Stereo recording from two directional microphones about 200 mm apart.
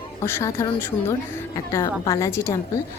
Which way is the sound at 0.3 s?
15° left (ahead or behind).